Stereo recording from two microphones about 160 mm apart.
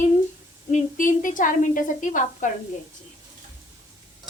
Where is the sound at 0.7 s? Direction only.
55° left (ahead or behind).